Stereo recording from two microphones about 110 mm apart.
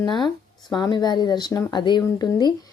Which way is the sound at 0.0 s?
45° left (ahead or behind).